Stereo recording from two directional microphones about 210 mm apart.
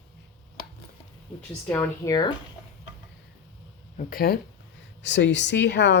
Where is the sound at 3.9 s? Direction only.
45° left (ahead or behind).